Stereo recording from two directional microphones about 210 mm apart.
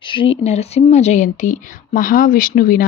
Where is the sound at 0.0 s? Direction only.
25° left (ahead or behind).